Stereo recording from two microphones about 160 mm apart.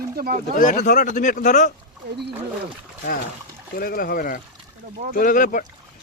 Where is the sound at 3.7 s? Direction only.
70° left (ahead or behind).